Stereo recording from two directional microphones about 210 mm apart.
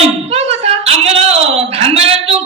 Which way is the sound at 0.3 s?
30° right (ahead or behind).